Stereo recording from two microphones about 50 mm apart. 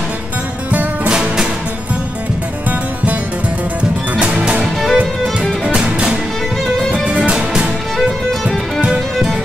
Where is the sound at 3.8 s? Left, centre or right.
Right.